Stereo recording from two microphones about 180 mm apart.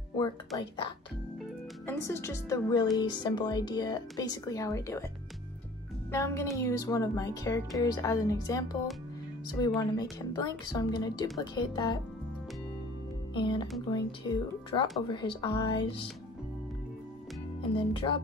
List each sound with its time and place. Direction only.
0.6 s a woman's voice: 25° left (ahead or behind)
1.9 s a woman's voice: 15° left (ahead or behind)
6.1 s a woman's voice: 15° left (ahead or behind)
13.3 s a woman's voice: 25° left (ahead or behind)
17.7 s a woman's voice: 30° left (ahead or behind)